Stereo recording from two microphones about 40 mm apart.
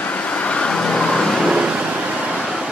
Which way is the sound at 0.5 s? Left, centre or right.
Left.